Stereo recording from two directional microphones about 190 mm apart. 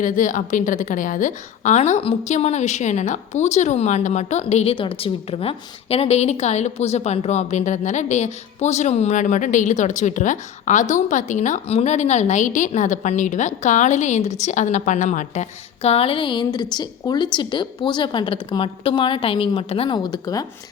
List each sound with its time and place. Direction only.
0.0 s a woman's voice: 45° left (ahead or behind); by 20.4 s 20° left (ahead or behind)